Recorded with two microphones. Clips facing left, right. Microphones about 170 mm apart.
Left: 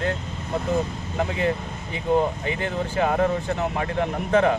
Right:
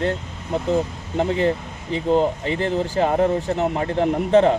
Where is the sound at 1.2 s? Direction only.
30° right (ahead or behind).